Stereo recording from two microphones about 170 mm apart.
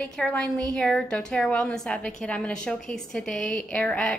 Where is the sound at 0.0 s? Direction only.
5° left (ahead or behind).